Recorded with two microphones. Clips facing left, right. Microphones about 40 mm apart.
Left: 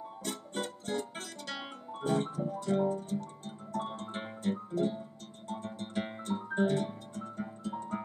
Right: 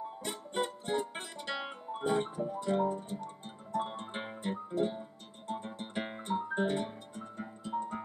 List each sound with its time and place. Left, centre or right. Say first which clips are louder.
0.2 s music: right 2 dB; centre